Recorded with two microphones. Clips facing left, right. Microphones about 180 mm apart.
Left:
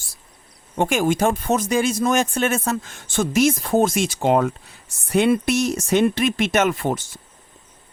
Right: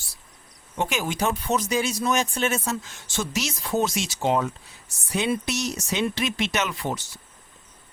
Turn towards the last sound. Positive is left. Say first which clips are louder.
# left 8 dB
turn(degrees=50)  # may be behind; listen again after turning